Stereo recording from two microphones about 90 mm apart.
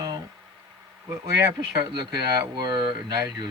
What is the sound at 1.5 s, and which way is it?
Speech, 50° right (ahead or behind).